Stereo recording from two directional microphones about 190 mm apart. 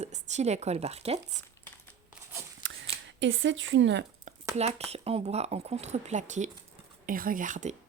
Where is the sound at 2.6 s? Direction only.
75° right (ahead or behind).